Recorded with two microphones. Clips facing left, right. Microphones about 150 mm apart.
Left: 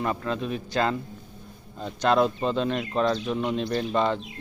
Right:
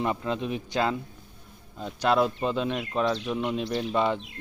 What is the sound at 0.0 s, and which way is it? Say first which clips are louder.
Speech: even; 15° right (ahead or behind).